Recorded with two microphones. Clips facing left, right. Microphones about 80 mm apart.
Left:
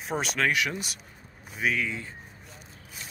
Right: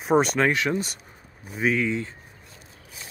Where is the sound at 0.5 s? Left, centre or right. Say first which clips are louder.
Right 4 dB; right.